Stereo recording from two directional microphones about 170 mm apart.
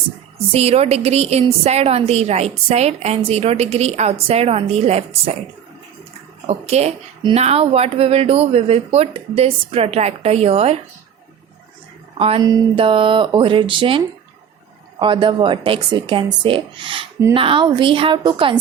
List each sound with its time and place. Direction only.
0.5 s a woman's voice: 35° right (ahead or behind)
6.5 s a woman's voice: 40° right (ahead or behind)
12.1 s speech: 35° right (ahead or behind)
12.4 s speech: 20° right (ahead or behind)